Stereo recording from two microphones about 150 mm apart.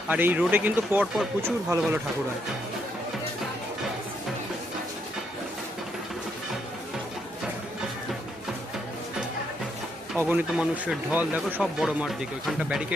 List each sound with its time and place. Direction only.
0.1 s speech: 10° right (ahead or behind)
10.2 s speech: 10° right (ahead or behind)